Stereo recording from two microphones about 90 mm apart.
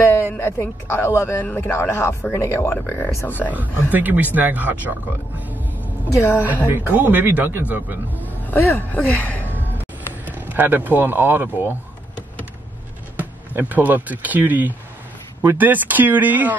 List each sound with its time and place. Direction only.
0.0 s speech: 25° left (ahead or behind)
3.4 s a man's voice: 20° right (ahead or behind)
6.0 s a woman's voice: 30° left (ahead or behind)
6.4 s a man's voice: 20° right (ahead or behind)
8.4 s speech: 20° left (ahead or behind)
9.8 s a sound: 20° right (ahead or behind)
13.2 s a man's voice: 20° right (ahead or behind)